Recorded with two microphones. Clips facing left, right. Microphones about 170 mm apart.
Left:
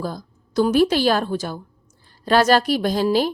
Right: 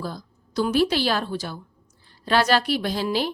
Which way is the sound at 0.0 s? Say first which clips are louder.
Left 4 dB; 45° left (ahead or behind).